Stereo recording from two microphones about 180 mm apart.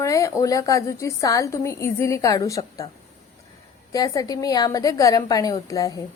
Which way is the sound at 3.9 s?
20° left (ahead or behind).